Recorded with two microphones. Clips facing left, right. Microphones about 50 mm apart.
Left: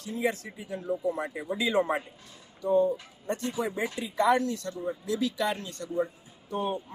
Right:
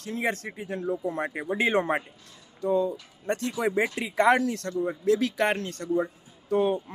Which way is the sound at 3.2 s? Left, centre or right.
Right.